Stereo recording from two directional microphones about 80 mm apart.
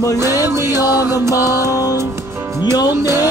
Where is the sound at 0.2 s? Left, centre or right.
Right.